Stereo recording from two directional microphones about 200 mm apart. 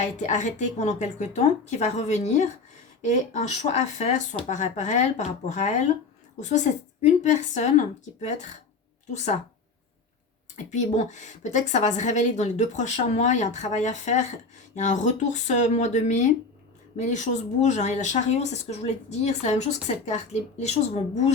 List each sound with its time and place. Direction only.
0.0 s speech: 35° left (ahead or behind)
9.1 s speech: 35° left (ahead or behind)
10.7 s speech: 35° left (ahead or behind)